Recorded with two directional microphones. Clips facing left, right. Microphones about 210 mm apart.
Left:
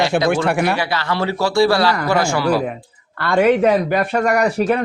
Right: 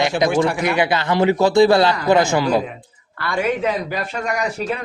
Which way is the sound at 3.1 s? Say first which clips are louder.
Left 7 dB; 60° left (ahead or behind).